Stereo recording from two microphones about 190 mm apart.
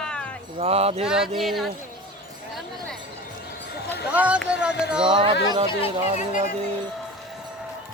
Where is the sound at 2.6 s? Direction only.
Centre (ahead or behind).